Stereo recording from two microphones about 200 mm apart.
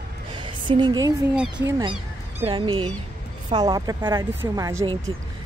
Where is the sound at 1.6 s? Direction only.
25° right (ahead or behind).